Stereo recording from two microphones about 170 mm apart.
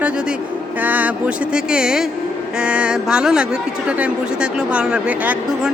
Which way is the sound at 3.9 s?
5° right (ahead or behind).